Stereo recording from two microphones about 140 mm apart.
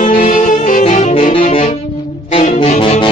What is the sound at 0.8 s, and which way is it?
Saxophone, 50° left (ahead or behind).